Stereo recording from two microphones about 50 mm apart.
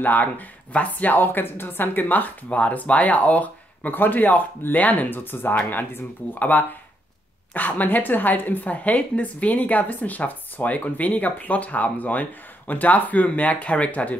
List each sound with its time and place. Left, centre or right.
0.0 s a woman's voice: left